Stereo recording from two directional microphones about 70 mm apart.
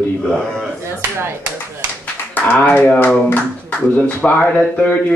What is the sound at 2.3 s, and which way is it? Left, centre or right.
Speech, left.